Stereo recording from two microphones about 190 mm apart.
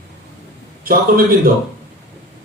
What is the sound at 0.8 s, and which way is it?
Speech, 50° right (ahead or behind).